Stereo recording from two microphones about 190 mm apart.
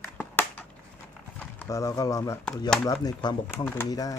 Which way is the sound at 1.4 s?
10° left (ahead or behind).